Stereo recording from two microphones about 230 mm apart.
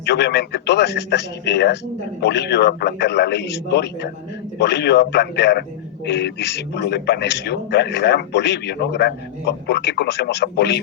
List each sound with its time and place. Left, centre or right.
0.0 s a man's voice: left